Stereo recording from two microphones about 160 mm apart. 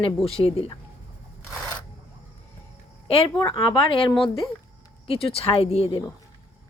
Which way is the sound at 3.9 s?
35° left (ahead or behind).